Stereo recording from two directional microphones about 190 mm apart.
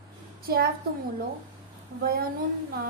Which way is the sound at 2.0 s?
50° right (ahead or behind).